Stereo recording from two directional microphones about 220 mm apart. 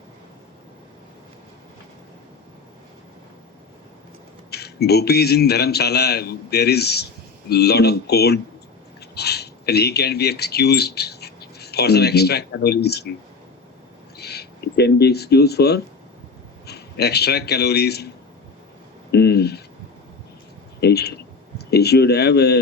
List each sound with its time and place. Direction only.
4.5 s a man's voice: 45° left (ahead or behind)
14.2 s a man's voice: 45° left (ahead or behind)
19.1 s a man's voice: 45° left (ahead or behind)
20.8 s a man's voice: 45° left (ahead or behind)